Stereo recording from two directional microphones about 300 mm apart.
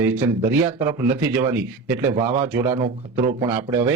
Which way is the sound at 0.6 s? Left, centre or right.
Centre.